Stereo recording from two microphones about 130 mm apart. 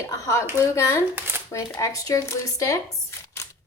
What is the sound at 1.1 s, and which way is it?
Shuffling cards, 15° right (ahead or behind).